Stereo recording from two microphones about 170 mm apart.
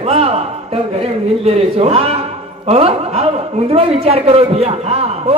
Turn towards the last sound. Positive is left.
turn(degrees=-35)  # may be behind; listen again after turning